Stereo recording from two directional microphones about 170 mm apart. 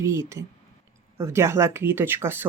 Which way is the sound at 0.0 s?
15° right (ahead or behind).